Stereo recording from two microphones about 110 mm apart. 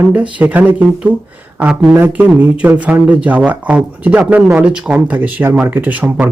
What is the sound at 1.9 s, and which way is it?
Speech, 15° right (ahead or behind).